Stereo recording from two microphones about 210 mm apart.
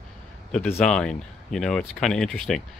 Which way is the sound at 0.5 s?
5° left (ahead or behind).